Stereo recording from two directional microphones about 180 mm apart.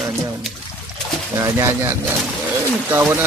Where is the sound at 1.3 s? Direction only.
15° right (ahead or behind).